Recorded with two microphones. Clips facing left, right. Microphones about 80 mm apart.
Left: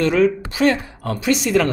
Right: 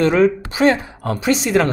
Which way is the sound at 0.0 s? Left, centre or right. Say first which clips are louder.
Right 2 dB; right.